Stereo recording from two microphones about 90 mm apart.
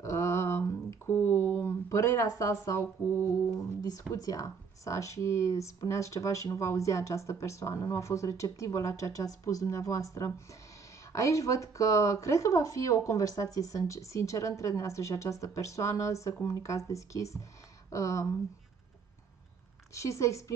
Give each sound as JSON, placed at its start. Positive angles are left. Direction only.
{"t": 0.0, "sound": "a sound", "side_deg": 35}
{"t": 3.8, "sound": "speech", "side_deg": 40}
{"t": 19.9, "sound": "speech", "side_deg": 35}